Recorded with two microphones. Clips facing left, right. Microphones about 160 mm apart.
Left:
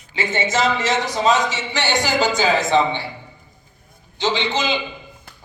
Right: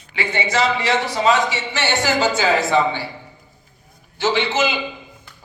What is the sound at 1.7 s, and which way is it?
Speech, 15° left (ahead or behind).